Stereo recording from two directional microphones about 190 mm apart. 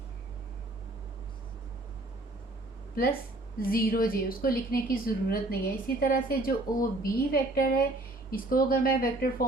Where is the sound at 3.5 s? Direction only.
50° left (ahead or behind).